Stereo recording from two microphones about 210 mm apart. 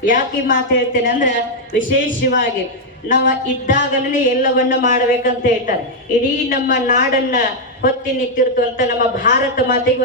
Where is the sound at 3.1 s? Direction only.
40° left (ahead or behind).